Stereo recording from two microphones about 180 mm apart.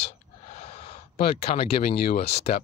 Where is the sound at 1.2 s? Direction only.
60° left (ahead or behind).